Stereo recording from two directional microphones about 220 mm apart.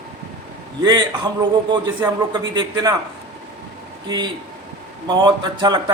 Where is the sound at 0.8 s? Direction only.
20° right (ahead or behind).